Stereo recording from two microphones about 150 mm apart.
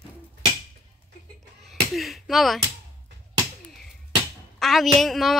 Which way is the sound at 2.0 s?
Centre (ahead or behind).